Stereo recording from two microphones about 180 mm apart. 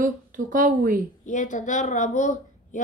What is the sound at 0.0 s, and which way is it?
A woman's voice, 50° right (ahead or behind).